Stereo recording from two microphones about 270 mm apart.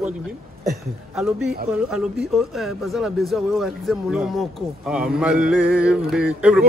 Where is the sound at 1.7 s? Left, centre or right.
Centre.